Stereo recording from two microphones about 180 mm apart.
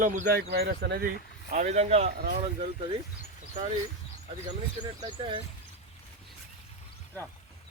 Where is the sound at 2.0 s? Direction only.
55° right (ahead or behind).